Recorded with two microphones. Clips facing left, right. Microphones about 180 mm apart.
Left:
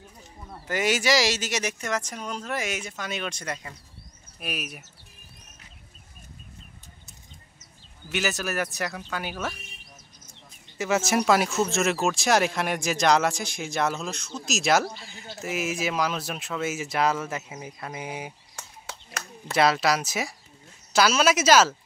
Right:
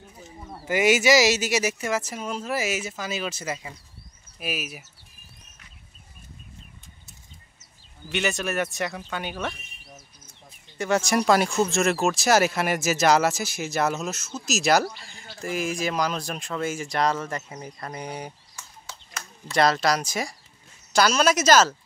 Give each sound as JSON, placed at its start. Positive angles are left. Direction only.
{"t": 0.5, "sound": "speech", "side_deg": -10}
{"t": 8.1, "sound": "speech", "side_deg": 0}
{"t": 10.8, "sound": "speech", "side_deg": 5}
{"t": 18.6, "sound": "a sound", "side_deg": 60}
{"t": 19.5, "sound": "speech", "side_deg": 5}